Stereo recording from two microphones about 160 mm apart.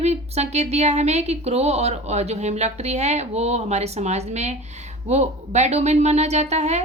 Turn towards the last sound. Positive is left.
turn(degrees=-45)  # may be behind; listen again after turning